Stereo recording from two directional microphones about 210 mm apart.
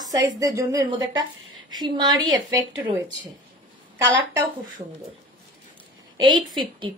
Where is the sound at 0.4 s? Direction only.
15° right (ahead or behind).